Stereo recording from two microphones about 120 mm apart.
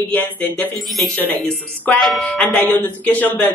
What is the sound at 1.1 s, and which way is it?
Speech, 15° left (ahead or behind).